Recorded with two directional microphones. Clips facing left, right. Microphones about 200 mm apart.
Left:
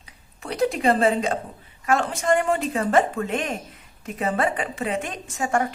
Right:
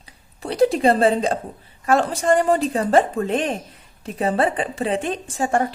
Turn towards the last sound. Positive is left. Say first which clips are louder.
# right 3 dB
turn(degrees=-30)  # may be behind; listen again after turning